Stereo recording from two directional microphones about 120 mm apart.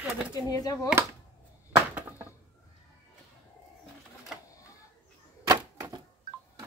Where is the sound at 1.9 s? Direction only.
15° right (ahead or behind).